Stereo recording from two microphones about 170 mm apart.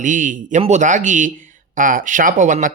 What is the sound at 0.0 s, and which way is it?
Speech, 50° right (ahead or behind).